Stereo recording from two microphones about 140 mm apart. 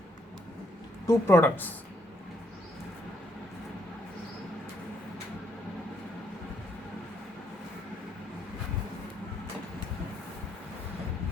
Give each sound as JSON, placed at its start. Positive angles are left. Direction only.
{"t": 1.0, "sound": "speech", "side_deg": 15}